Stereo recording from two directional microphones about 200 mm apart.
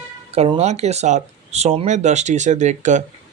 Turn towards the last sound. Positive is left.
turn(degrees=-35)  # may be behind; listen again after turning